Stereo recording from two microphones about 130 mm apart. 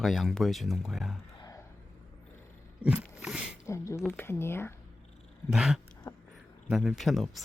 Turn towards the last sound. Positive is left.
turn(degrees=0)  # may be behind; listen again after turning